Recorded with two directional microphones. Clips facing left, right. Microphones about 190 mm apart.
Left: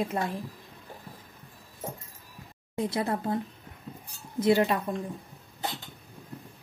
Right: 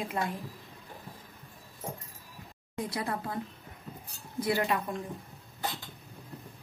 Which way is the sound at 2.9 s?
25° left (ahead or behind).